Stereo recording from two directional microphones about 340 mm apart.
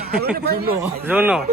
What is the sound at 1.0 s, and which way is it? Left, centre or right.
Speech, centre.